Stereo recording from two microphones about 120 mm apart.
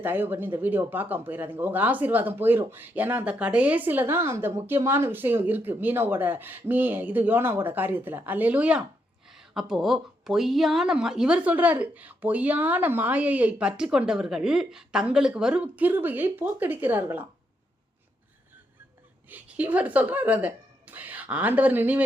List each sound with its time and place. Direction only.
0.0 s speech: 15° right (ahead or behind)
19.3 s speech: 15° right (ahead or behind)